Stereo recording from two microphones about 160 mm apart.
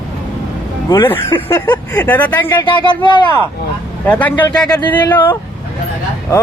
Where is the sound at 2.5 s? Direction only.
30° left (ahead or behind).